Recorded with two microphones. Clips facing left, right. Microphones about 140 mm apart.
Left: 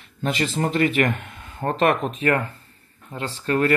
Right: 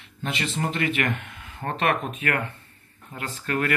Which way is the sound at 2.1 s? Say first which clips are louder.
Left 6 dB; 35° left (ahead or behind).